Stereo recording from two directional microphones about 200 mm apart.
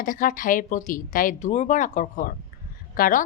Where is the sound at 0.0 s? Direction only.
40° left (ahead or behind).